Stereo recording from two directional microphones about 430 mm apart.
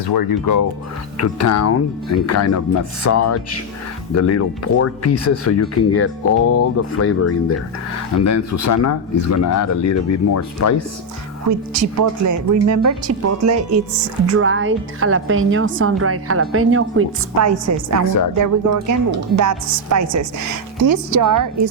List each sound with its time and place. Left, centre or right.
0.1 s speech: left
1.2 s speech: left
11.8 s a woman's voice: right